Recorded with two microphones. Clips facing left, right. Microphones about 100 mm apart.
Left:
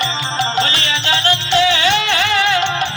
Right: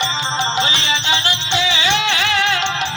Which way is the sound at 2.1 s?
Centre (ahead or behind).